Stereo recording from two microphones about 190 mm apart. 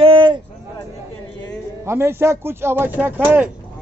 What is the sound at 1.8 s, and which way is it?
Speech, 15° right (ahead or behind).